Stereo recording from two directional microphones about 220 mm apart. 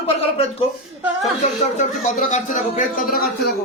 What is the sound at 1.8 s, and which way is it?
Speech, 35° left (ahead or behind).